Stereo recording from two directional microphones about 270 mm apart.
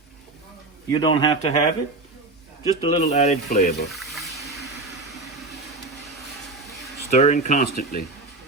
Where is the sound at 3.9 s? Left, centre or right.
Centre.